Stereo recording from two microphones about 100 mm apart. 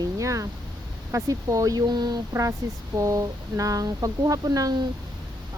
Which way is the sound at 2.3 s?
30° right (ahead or behind).